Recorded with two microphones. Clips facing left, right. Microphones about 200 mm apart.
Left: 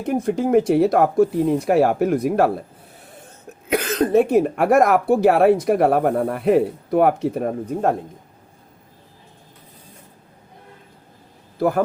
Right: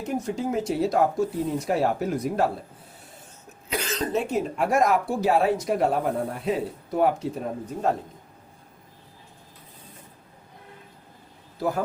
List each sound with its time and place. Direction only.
0.0 s speech: 55° left (ahead or behind)
3.7 s speech: 55° left (ahead or behind)